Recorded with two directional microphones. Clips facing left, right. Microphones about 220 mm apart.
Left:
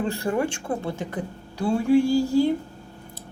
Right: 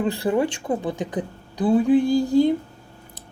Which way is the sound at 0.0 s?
20° right (ahead or behind).